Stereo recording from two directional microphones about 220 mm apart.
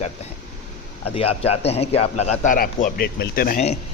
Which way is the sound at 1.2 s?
25° left (ahead or behind).